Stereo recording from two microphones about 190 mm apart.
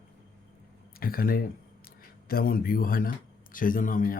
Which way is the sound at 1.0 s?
50° left (ahead or behind).